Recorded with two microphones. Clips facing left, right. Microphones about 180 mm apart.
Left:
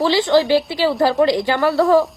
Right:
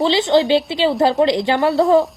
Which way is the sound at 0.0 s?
20° right (ahead or behind).